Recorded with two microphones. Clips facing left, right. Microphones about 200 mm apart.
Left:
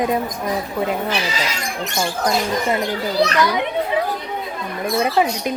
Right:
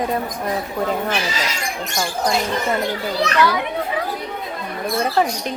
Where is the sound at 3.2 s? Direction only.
35° left (ahead or behind).